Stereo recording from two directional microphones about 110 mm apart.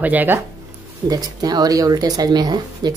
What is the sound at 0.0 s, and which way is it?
Speech, 15° right (ahead or behind).